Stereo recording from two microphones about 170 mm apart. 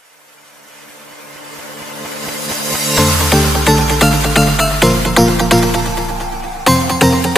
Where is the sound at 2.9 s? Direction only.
Centre (ahead or behind).